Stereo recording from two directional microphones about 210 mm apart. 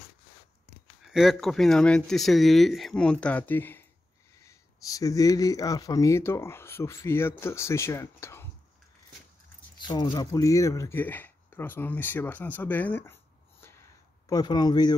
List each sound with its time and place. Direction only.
1.0 s speech: centre (ahead or behind)
9.8 s speech: 20° left (ahead or behind)